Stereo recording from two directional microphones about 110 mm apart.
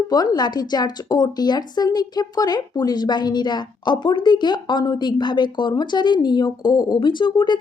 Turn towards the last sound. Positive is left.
turn(degrees=40)  # may be behind; listen again after turning